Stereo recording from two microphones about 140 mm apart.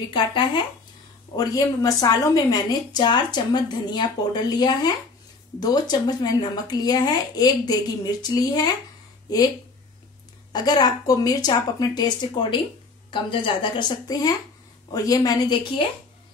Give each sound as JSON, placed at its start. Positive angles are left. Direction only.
{"t": 0.1, "sound": "a woman's voice", "side_deg": 35}
{"t": 10.5, "sound": "a woman's voice", "side_deg": 30}